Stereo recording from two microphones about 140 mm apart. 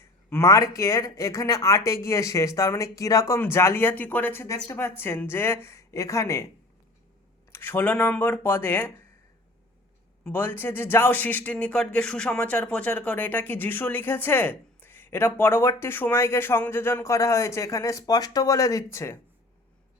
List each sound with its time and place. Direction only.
0.0 s a sound: 15° left (ahead or behind)
0.8 s speech: 20° left (ahead or behind)
7.5 s speech: 15° left (ahead or behind)
10.2 s speech: 15° left (ahead or behind)